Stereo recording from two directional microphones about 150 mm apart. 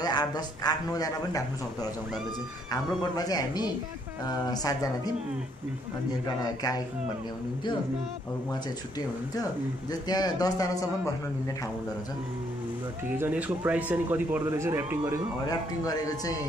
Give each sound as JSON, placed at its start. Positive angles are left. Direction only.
{"t": 0.0, "sound": "a man's voice", "side_deg": 25}
{"t": 3.2, "sound": "a man's voice", "side_deg": 25}
{"t": 6.2, "sound": "a man's voice", "side_deg": 25}
{"t": 10.0, "sound": "a man's voice", "side_deg": 25}
{"t": 13.1, "sound": "speech", "side_deg": -10}
{"t": 15.4, "sound": "a man's voice", "side_deg": 25}